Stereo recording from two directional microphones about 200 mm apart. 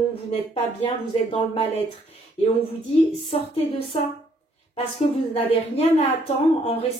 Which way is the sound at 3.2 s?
30° left (ahead or behind).